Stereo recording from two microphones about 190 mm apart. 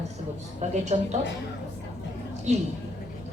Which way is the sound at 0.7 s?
35° right (ahead or behind).